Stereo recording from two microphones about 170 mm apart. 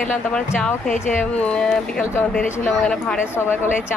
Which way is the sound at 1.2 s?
10° left (ahead or behind).